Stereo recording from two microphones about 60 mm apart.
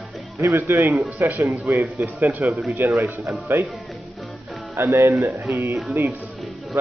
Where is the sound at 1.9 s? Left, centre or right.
Right.